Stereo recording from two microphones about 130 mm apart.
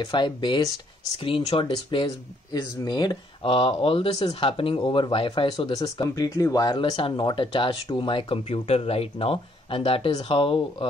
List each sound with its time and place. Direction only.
0.0 s speech: 35° left (ahead or behind)
1.1 s speech: 50° left (ahead or behind)
5.7 s speech: 30° left (ahead or behind)